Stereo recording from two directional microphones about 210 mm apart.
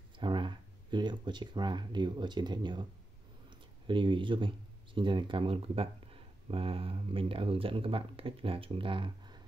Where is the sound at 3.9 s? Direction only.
25° right (ahead or behind).